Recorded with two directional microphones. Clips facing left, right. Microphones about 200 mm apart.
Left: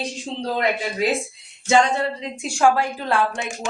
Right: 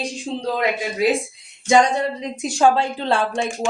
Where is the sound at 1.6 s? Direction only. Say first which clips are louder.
Right 2 dB; 15° right (ahead or behind).